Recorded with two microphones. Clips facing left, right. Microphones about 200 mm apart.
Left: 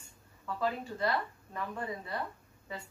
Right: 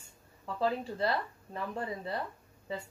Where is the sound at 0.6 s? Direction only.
30° right (ahead or behind).